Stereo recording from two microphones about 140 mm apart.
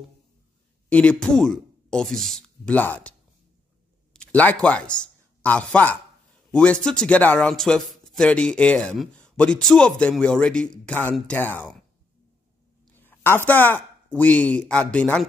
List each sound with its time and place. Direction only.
0.8 s a man's voice: 10° left (ahead or behind)
12.9 s a sound: 15° left (ahead or behind)
13.5 s speech: 15° left (ahead or behind)